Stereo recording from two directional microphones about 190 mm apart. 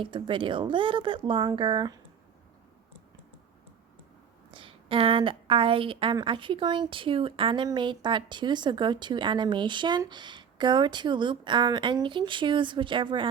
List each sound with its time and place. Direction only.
0.0 s a woman's voice: 25° right (ahead or behind)
4.5 s a woman's voice: 30° right (ahead or behind)